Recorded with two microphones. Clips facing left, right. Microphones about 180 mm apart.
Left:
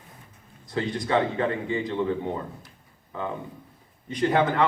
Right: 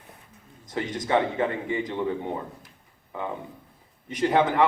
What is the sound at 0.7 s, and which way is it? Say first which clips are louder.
A man's voice: even; 15° right (ahead or behind).